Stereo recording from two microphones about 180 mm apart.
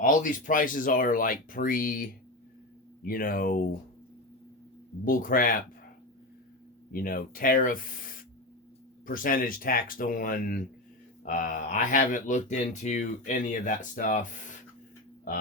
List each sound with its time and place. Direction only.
0.0 s speech: 50° left (ahead or behind)
5.0 s speech: 50° left (ahead or behind)
6.9 s speech: 55° left (ahead or behind)